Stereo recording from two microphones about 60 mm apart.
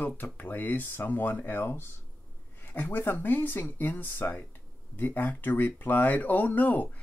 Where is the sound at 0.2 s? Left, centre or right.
Left.